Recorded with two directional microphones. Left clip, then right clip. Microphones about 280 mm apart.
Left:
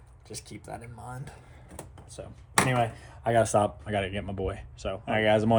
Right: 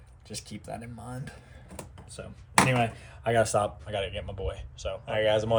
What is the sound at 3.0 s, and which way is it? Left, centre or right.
Speech, centre.